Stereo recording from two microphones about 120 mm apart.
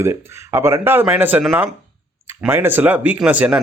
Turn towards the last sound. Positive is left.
turn(degrees=-10)  # may be behind; listen again after turning